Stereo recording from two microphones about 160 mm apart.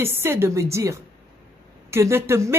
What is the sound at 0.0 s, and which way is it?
Speech, 15° right (ahead or behind).